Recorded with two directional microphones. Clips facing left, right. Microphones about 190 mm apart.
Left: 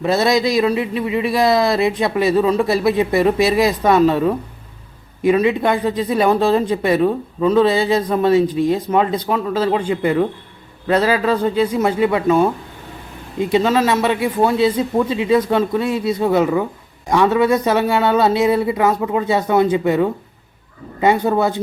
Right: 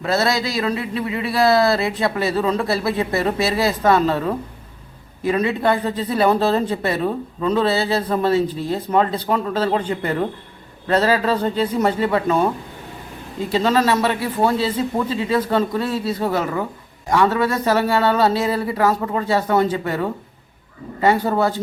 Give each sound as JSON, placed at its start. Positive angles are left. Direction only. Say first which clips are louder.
{"t": 0.0, "sound": "speech", "louder": "left 4 dB", "side_deg": 20}
{"t": 13.6, "sound": "speech", "louder": "even", "side_deg": 10}